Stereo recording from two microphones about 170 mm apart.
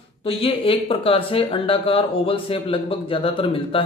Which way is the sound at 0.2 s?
35° left (ahead or behind).